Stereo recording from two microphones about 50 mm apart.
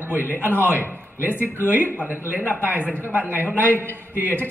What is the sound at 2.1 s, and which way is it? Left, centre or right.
A man's voice, right.